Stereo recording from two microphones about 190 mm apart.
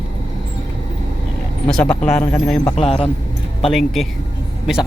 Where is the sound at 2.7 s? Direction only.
30° left (ahead or behind).